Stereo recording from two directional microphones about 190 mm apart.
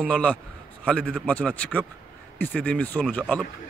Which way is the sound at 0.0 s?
5° left (ahead or behind).